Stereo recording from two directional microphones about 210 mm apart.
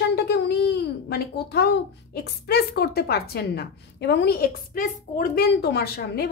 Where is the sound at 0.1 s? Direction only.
50° left (ahead or behind).